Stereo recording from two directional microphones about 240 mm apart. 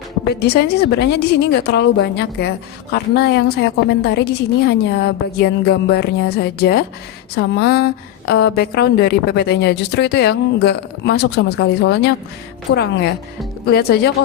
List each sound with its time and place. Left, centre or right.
0.3 s a woman's voice: left